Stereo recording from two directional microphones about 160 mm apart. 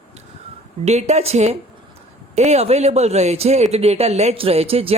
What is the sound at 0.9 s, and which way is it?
A woman's voice, 45° right (ahead or behind).